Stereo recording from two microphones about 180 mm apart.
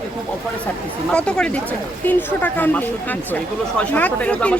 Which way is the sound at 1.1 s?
5° left (ahead or behind).